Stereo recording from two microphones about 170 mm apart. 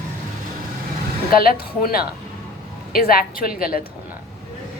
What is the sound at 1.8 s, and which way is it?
A woman's voice, 60° left (ahead or behind).